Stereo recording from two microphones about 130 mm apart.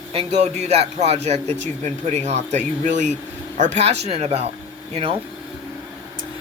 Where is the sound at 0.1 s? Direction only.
55° right (ahead or behind); by 3.2 s 70° right (ahead or behind).